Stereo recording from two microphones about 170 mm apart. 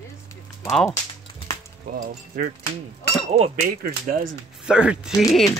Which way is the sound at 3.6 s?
55° right (ahead or behind).